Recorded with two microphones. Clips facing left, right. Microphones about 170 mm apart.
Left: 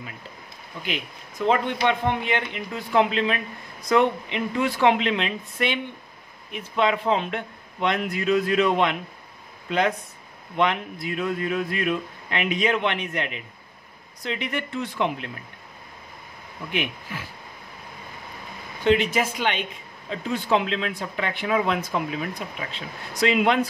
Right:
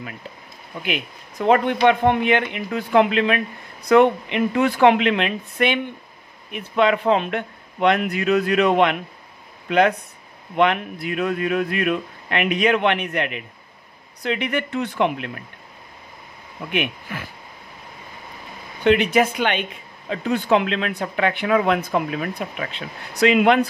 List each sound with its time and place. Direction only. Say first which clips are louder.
0.8 s speech: right 4 dB; 60° right (ahead or behind)
16.7 s speech: right 4 dB; 60° right (ahead or behind)
18.9 s speech: right 4 dB; 60° right (ahead or behind)